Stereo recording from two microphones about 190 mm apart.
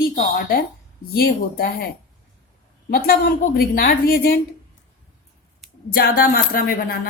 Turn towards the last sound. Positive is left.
turn(degrees=50)  # may be behind; listen again after turning